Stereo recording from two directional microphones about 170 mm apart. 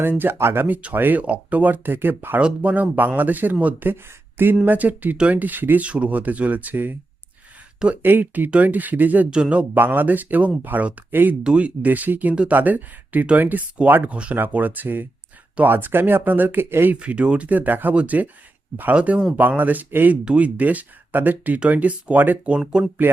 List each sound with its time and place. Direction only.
0.0 s speech: 10° right (ahead or behind)